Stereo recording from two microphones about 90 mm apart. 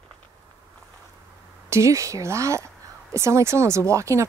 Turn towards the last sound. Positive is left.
turn(degrees=-35)  # may be behind; listen again after turning